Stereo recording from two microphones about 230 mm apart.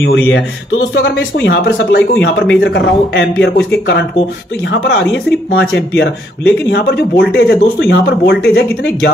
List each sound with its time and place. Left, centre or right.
0.0 s speech: left
5.5 s speech: left